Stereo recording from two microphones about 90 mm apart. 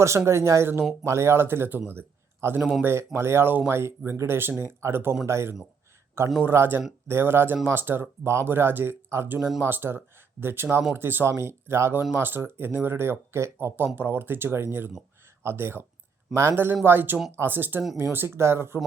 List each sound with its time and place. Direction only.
0.3 s speech: 30° right (ahead or behind)
2.6 s speech: 5° right (ahead or behind)
2.8 s speech: 25° right (ahead or behind)
9.4 s speech: 5° right (ahead or behind)
9.6 s speech: 25° right (ahead or behind)